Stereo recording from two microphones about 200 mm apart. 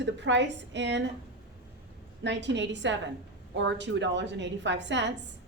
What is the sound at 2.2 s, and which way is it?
A woman's voice, 60° right (ahead or behind).